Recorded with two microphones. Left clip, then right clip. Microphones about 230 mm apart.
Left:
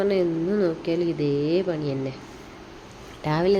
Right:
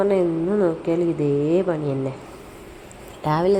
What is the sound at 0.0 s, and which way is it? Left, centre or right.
A woman's voice, centre.